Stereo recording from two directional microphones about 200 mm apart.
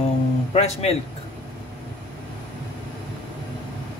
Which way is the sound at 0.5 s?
30° left (ahead or behind).